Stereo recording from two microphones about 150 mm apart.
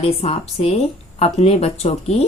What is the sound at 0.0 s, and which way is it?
A woman's voice, 40° left (ahead or behind).